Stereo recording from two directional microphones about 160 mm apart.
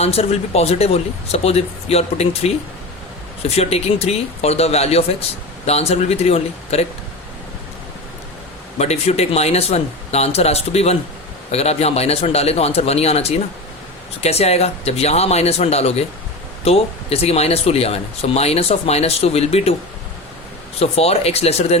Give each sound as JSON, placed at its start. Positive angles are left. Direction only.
{"t": 0.0, "sound": "speech", "side_deg": 40}
{"t": 3.5, "sound": "speech", "side_deg": 40}
{"t": 8.8, "sound": "speech", "side_deg": 40}
{"t": 20.7, "sound": "speech", "side_deg": 40}